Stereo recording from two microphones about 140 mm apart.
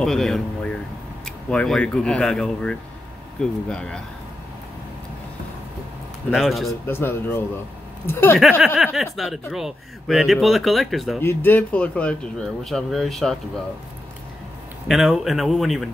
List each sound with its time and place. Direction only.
0.0 s speech: 5° left (ahead or behind)
6.3 s speech: centre (ahead or behind)
6.9 s speech: 15° left (ahead or behind)
8.9 s speech: centre (ahead or behind)
11.1 s speech: 15° left (ahead or behind)
14.9 s speech: centre (ahead or behind)